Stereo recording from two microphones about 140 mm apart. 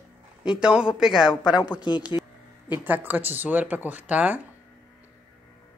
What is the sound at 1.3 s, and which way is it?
Speech, 30° left (ahead or behind).